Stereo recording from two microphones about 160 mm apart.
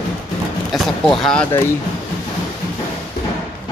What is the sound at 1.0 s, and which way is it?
Speech, 5° left (ahead or behind).